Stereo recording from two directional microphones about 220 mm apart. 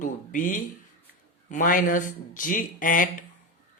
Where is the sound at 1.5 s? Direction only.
35° left (ahead or behind).